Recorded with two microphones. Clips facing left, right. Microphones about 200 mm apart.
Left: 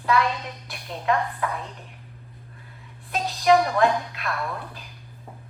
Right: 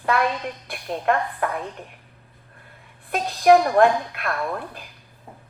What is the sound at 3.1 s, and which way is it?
A woman's voice, 55° right (ahead or behind).